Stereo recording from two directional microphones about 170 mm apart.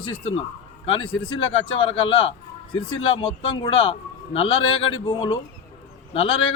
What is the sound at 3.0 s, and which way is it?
A man's voice, 30° left (ahead or behind).